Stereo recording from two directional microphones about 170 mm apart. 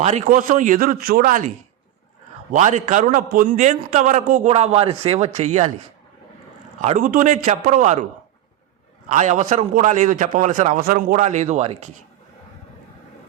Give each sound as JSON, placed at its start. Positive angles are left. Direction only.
{"t": 0.0, "sound": "a man's voice", "side_deg": -40}
{"t": 0.3, "sound": "a man's voice", "side_deg": -50}
{"t": 2.5, "sound": "a man's voice", "side_deg": -45}
{"t": 6.7, "sound": "a man's voice", "side_deg": -45}
{"t": 9.0, "sound": "a man's voice", "side_deg": -45}
{"t": 10.8, "sound": "a man's voice", "side_deg": -55}